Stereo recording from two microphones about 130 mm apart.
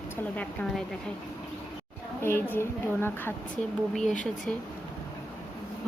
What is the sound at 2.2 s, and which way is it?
A woman's voice, 15° left (ahead or behind).